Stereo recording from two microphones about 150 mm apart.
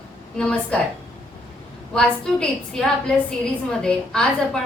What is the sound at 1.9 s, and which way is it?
A woman's voice, 5° left (ahead or behind).